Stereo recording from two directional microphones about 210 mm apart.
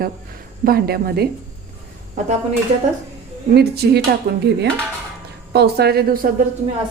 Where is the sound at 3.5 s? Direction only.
50° right (ahead or behind).